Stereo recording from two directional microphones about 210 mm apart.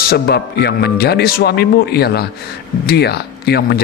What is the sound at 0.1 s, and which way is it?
Speech, 50° left (ahead or behind).